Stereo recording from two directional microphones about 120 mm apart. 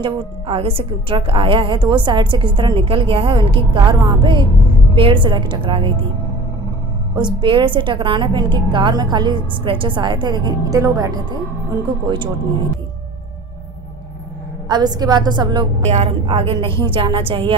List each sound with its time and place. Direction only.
0.0 s a woman's voice: 55° right (ahead or behind)
7.2 s a woman's voice: 40° right (ahead or behind)
14.7 s a woman's voice: 35° right (ahead or behind)
15.8 s a woman's voice: 60° right (ahead or behind)